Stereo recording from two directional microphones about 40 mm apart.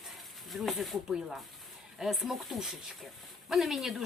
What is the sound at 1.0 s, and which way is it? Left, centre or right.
Speech, centre.